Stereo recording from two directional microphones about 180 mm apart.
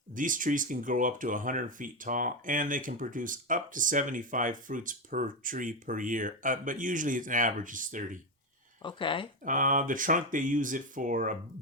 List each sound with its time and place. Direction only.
0.2 s speech: 50° right (ahead or behind)
8.8 s speech: 25° left (ahead or behind)
9.4 s speech: 45° right (ahead or behind)